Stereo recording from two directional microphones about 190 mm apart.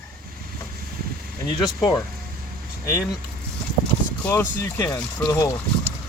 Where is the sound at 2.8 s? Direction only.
15° left (ahead or behind).